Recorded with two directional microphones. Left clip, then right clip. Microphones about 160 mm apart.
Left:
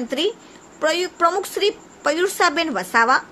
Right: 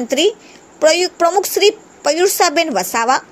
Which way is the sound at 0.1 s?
20° right (ahead or behind).